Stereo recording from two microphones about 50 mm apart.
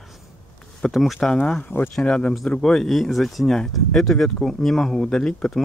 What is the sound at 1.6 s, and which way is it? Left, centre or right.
Speech, left.